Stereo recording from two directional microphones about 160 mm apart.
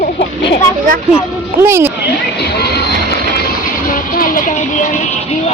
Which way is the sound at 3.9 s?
60° left (ahead or behind).